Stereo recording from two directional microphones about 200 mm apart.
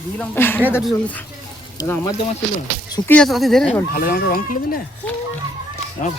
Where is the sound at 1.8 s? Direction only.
15° left (ahead or behind).